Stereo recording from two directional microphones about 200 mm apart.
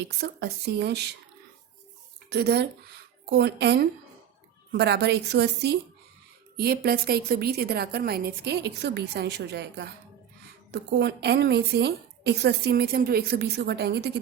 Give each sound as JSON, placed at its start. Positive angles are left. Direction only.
{"t": 0.2, "sound": "a woman's voice", "side_deg": -55}
{"t": 2.3, "sound": "a woman's voice", "side_deg": -55}